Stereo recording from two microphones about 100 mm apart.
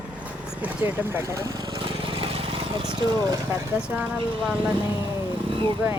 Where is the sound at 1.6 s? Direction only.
60° right (ahead or behind).